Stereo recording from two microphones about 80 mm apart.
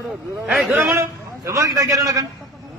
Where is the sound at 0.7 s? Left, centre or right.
Right.